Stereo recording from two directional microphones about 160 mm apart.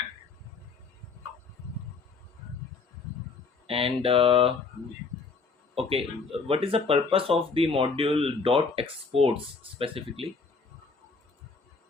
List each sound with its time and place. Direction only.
3.7 s speech: 35° right (ahead or behind)
5.7 s speech: 35° right (ahead or behind)